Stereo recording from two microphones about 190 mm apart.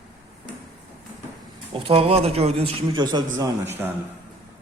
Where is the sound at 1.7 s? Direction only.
30° right (ahead or behind).